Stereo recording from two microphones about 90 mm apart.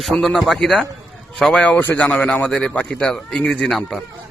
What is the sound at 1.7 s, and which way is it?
Speech, 20° left (ahead or behind).